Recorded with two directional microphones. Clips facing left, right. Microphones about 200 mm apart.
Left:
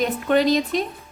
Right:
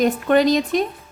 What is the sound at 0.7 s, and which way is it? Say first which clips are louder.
Speech: right 4 dB; 50° right (ahead or behind).